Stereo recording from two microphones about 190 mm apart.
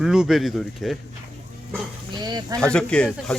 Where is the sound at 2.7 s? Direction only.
5° left (ahead or behind).